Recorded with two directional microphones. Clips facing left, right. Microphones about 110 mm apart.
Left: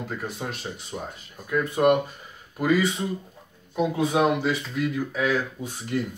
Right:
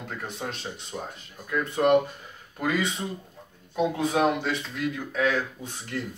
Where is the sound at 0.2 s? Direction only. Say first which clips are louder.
Left 2 dB; 5° left (ahead or behind).